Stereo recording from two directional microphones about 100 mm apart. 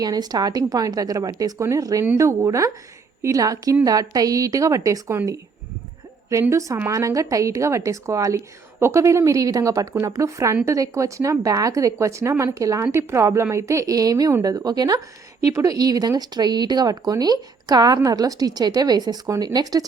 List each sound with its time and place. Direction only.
0.0 s speech: 40° right (ahead or behind)
6.5 s speech: 30° right (ahead or behind)